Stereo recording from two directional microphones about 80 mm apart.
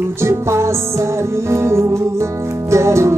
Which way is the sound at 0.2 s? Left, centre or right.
Right.